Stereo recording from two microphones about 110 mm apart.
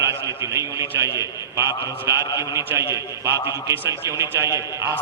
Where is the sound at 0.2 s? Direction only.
25° right (ahead or behind).